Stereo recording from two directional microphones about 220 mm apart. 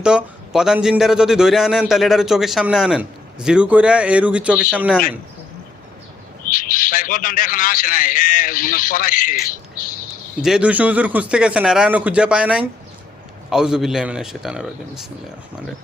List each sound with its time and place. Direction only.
0.0 s a man's voice: 5° right (ahead or behind)
6.5 s a man's voice: 40° left (ahead or behind)
10.4 s a man's voice: 5° right (ahead or behind)